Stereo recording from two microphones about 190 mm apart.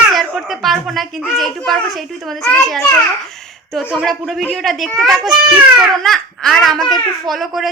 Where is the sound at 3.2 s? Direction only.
Centre (ahead or behind).